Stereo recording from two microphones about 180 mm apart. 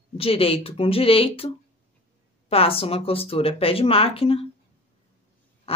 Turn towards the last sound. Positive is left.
turn(degrees=35)  # may be behind; listen again after turning